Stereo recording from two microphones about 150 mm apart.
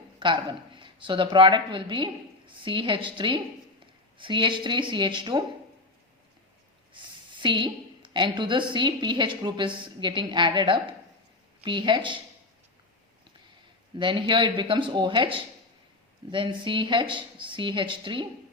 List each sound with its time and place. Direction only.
0.2 s a woman's voice: 30° right (ahead or behind)
6.9 s a woman's voice: 30° right (ahead or behind)
14.0 s a woman's voice: 35° right (ahead or behind)